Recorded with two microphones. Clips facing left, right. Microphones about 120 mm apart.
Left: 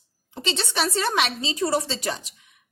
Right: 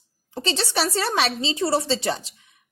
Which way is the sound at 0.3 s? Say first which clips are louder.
Right 2 dB; 35° right (ahead or behind).